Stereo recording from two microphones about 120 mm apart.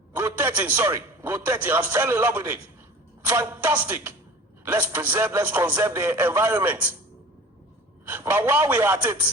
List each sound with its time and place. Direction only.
0.1 s a man's voice: 20° right (ahead or behind)
8.0 s a man's voice: 15° right (ahead or behind)